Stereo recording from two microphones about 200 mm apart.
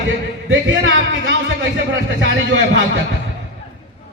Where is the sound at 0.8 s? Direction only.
65° right (ahead or behind).